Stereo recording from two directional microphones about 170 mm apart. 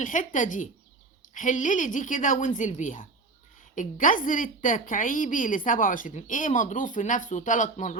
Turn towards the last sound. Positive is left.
turn(degrees=45)  # may be behind; listen again after turning